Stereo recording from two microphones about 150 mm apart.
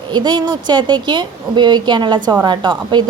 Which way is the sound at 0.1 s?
30° right (ahead or behind).